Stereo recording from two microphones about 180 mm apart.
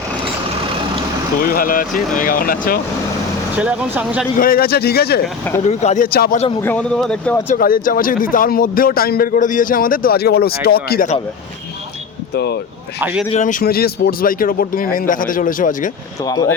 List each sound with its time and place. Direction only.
1.4 s speech: 50° left (ahead or behind)
3.6 s speech: 5° right (ahead or behind)
4.4 s speech: 55° left (ahead or behind)
5.6 s speech: 40° left (ahead or behind)
6.1 s speech: 55° left (ahead or behind)
6.6 s speech: 10° left (ahead or behind)
7.4 s speech: 50° left (ahead or behind)
12.3 s speech: 65° left (ahead or behind)
13.0 s speech: 10° right (ahead or behind)
13.2 s speech: 40° left (ahead or behind)
16.2 s speech: 20° left (ahead or behind)